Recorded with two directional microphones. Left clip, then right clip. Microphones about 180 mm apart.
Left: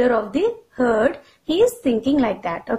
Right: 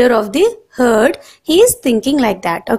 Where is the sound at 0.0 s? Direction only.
40° right (ahead or behind).